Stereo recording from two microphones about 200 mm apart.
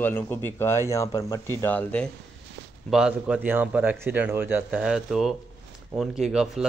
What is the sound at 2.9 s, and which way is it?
A man's voice, 5° right (ahead or behind).